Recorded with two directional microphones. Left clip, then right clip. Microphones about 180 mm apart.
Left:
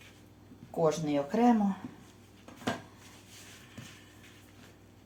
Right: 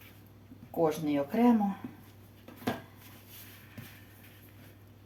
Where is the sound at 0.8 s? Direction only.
15° left (ahead or behind).